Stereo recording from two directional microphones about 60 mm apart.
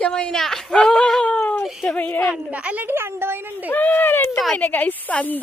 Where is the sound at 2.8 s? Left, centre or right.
Right.